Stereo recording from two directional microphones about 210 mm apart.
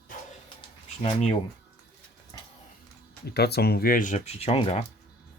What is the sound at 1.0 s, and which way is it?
Speech, 25° left (ahead or behind).